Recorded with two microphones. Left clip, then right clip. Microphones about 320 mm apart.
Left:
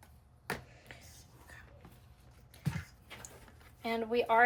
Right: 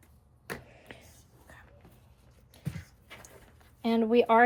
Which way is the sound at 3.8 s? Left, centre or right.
Right.